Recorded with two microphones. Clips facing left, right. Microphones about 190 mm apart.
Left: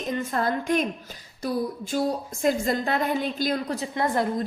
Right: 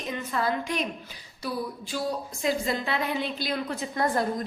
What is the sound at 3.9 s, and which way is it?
Speech, 25° left (ahead or behind).